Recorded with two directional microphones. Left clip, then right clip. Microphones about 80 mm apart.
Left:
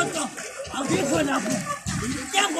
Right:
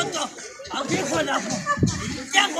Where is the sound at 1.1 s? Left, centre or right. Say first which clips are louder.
Right 2 dB; right.